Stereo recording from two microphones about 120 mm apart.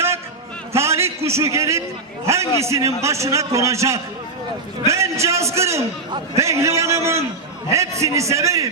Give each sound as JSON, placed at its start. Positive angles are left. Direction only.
{"t": 0.7, "sound": "a man's voice", "side_deg": -20}